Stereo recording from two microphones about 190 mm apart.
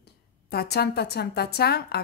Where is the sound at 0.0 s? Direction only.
55° left (ahead or behind).